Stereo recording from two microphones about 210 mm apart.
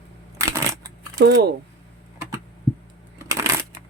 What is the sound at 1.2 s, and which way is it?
Speech, 55° right (ahead or behind).